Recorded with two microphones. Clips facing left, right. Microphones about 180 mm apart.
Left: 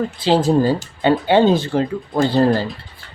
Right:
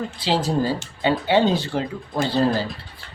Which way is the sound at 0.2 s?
55° left (ahead or behind).